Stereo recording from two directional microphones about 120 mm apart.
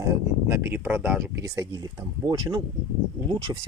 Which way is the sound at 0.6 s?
15° right (ahead or behind).